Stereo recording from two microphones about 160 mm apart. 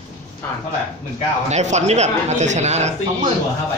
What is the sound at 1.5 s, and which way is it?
A man's voice, 45° right (ahead or behind).